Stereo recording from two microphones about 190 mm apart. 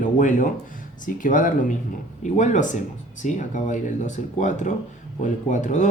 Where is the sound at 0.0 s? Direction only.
40° left (ahead or behind).